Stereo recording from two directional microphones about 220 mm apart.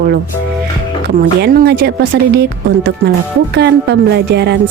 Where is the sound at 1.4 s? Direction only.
45° right (ahead or behind).